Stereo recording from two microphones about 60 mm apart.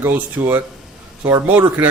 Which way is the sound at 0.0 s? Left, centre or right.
Right.